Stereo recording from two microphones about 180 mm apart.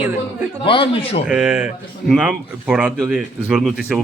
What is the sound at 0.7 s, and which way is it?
Speech, 30° left (ahead or behind).